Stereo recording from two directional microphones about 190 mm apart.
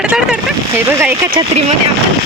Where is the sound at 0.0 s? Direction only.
5° right (ahead or behind).